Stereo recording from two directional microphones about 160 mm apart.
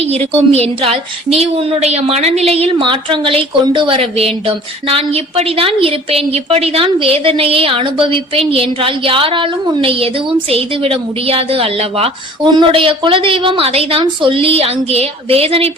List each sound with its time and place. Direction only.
0.0 s a woman's voice: 40° right (ahead or behind)